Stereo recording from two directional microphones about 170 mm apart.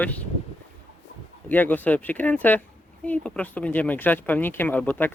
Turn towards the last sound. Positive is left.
turn(degrees=10)  # may be behind; listen again after turning